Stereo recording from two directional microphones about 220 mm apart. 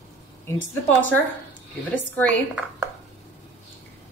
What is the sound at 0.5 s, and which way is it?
A woman's voice, 10° left (ahead or behind).